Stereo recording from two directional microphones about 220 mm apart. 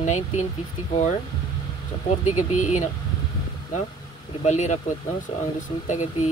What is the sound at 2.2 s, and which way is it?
Speech, 35° left (ahead or behind).